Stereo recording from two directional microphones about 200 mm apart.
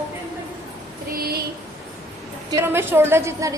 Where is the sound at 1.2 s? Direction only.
50° right (ahead or behind).